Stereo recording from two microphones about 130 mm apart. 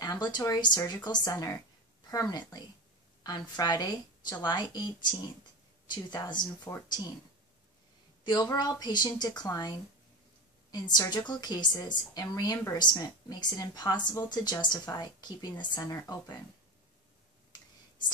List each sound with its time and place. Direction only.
0.0 s a woman's voice: 35° left (ahead or behind)
8.2 s a woman's voice: 35° left (ahead or behind)